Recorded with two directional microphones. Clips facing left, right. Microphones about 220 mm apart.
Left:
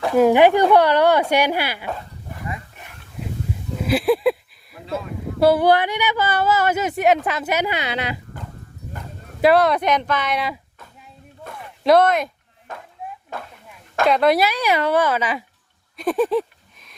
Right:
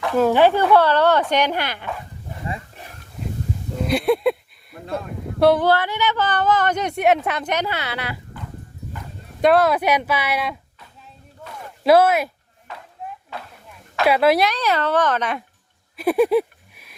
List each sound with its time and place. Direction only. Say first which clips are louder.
0.1 s speech: left 2 dB; 10° left (ahead or behind)
2.3 s wild animals: right 1 dB; 25° right (ahead or behind)
3.8 s speech: left 1 dB; centre (ahead or behind)
5.6 s speech: left 2 dB; 15° left (ahead or behind)
9.4 s speech: even; centre (ahead or behind)
11.8 s speech: even; 5° right (ahead or behind)
12.7 s a sound: left 1 dB; 45° left (ahead or behind)
14.1 s speech: even; 5° right (ahead or behind)
16.0 s a sound: right 3 dB; 10° right (ahead or behind)